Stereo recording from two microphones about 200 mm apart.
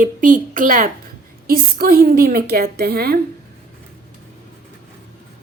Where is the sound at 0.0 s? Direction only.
40° right (ahead or behind).